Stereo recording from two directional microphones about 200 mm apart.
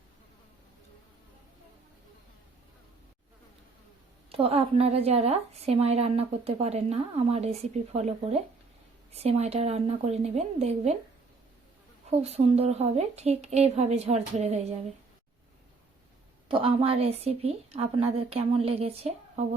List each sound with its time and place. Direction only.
4.3 s a woman's voice: 30° right (ahead or behind)
12.2 s a woman's voice: 30° right (ahead or behind)
16.5 s a woman's voice: 25° right (ahead or behind)